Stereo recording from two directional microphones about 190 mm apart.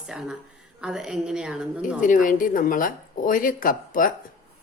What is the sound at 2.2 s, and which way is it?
Speech, 45° left (ahead or behind).